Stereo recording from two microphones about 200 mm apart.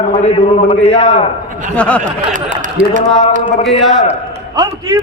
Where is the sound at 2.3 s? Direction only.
40° right (ahead or behind).